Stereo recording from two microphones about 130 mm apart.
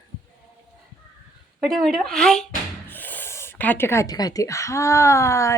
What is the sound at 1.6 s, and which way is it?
Speech, centre (ahead or behind).